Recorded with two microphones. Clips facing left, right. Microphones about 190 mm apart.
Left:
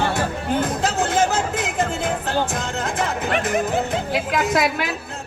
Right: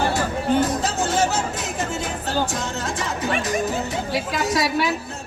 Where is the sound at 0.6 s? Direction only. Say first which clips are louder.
Even; 60° left (ahead or behind).